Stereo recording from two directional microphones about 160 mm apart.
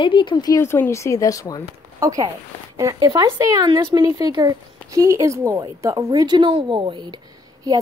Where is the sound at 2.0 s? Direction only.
20° right (ahead or behind).